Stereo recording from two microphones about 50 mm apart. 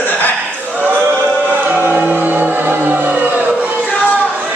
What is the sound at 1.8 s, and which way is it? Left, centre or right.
Choir, right.